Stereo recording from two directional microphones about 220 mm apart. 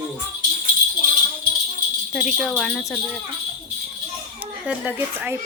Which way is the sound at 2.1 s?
Centre (ahead or behind).